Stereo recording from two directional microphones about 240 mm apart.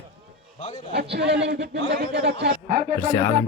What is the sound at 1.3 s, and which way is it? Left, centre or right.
A man's voice, right.